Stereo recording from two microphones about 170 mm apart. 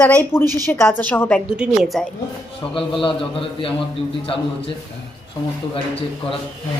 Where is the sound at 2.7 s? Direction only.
30° left (ahead or behind).